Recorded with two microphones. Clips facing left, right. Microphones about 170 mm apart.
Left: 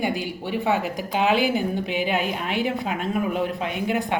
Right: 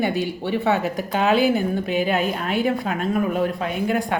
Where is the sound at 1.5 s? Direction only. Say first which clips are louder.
Right 3 dB; 45° right (ahead or behind).